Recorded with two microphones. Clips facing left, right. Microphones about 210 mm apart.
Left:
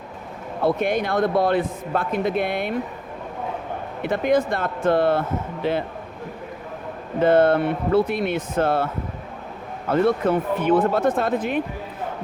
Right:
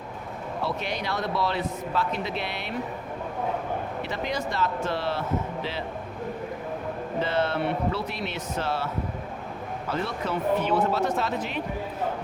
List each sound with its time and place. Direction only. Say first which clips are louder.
0.6 s speech: left 10 dB; 50° left (ahead or behind)
4.0 s speech: left 15 dB; 55° left (ahead or behind)
7.2 s speech: left 10 dB; 50° left (ahead or behind)
9.9 s speech: left 11 dB; 50° left (ahead or behind)